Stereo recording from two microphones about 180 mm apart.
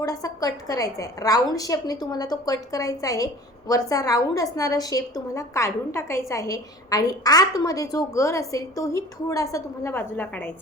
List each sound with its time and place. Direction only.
0.0 s a woman's voice: 20° left (ahead or behind)